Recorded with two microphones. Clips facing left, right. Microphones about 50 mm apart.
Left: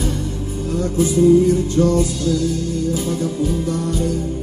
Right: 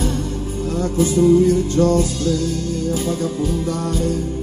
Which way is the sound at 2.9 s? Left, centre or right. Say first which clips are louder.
Even; right.